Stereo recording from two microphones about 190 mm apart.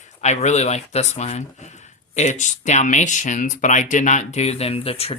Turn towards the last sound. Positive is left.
turn(degrees=30)  # may be behind; listen again after turning